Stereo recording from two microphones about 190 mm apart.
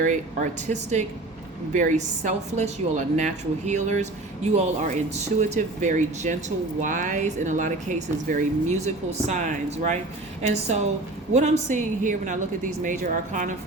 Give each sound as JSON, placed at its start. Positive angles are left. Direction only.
{"t": 0.0, "sound": "a woman's voice", "side_deg": -40}
{"t": 11.3, "sound": "a woman's voice", "side_deg": -35}